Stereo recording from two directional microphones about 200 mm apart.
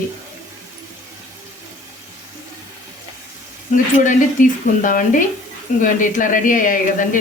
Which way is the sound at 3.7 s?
40° left (ahead or behind).